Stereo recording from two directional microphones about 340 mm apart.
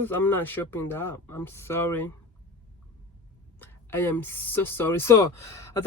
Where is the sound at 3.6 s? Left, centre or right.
Centre.